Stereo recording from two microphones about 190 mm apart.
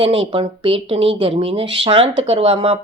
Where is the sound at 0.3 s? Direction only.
30° right (ahead or behind).